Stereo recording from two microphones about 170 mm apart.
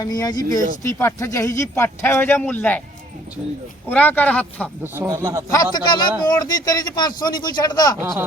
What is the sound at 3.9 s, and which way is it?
Speech, 10° left (ahead or behind).